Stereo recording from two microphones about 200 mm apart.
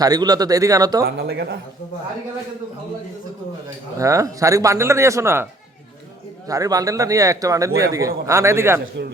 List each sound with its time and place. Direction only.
0.0 s speech: 20° right (ahead or behind)
1.0 s speech: 55° right (ahead or behind)
3.9 s speech: 15° right (ahead or behind)
6.5 s speech: 15° right (ahead or behind)